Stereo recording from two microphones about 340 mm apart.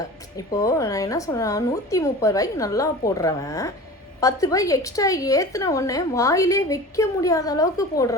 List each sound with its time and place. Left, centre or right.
0.3 s a woman's voice: centre